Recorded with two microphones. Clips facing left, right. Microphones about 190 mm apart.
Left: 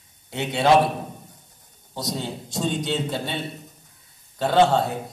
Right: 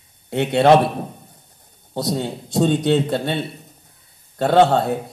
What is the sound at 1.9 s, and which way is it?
A man's voice, 60° right (ahead or behind).